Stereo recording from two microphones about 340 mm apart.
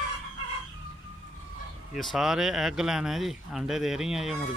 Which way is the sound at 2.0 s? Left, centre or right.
Centre.